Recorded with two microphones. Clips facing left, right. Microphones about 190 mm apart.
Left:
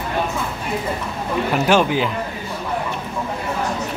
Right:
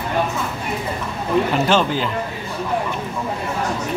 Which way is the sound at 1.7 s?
10° left (ahead or behind).